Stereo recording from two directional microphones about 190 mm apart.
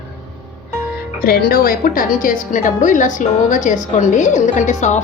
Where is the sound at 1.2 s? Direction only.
55° left (ahead or behind).